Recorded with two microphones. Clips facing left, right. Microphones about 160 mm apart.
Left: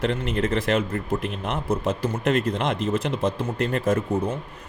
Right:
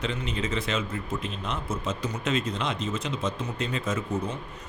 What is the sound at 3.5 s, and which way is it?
Speech, 55° left (ahead or behind).